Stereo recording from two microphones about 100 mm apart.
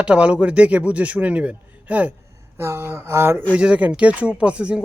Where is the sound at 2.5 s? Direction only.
25° right (ahead or behind).